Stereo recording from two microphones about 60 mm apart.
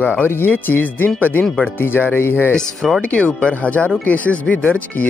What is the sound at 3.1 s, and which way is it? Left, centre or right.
Speech, centre.